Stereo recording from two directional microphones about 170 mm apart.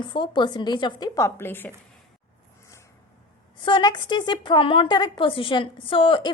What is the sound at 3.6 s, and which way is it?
A woman's voice, 30° left (ahead or behind).